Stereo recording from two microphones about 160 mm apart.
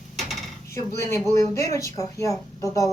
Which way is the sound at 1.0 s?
20° left (ahead or behind).